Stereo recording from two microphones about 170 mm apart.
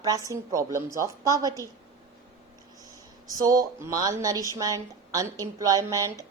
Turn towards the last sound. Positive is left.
turn(degrees=-20)  # may be behind; listen again after turning